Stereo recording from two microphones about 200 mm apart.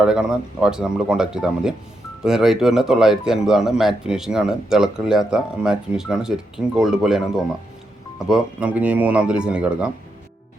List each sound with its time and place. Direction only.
0.0 s speech: 5° right (ahead or behind)